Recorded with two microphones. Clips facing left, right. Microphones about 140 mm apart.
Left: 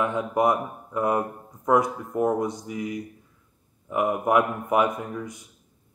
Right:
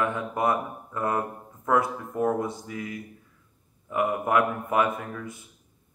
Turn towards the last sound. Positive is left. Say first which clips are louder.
# left 2 dB
turn(degrees=20)  # may be behind; listen again after turning